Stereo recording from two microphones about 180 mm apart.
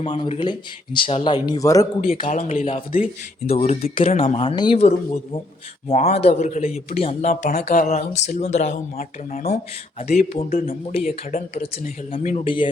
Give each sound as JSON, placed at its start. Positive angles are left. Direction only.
{"t": 0.2, "sound": "speech", "side_deg": 25}
{"t": 2.0, "sound": "speech", "side_deg": 30}
{"t": 2.2, "sound": "speech", "side_deg": 45}